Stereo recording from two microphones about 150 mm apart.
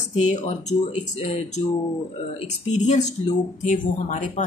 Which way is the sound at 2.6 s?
50° left (ahead or behind).